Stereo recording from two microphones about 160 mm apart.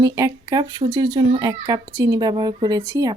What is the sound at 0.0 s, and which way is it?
A woman's voice, 25° right (ahead or behind).